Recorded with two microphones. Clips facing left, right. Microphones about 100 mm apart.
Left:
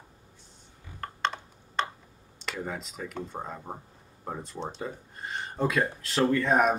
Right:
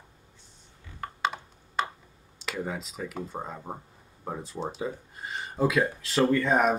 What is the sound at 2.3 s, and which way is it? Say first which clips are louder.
Speech: right 2 dB; centre (ahead or behind).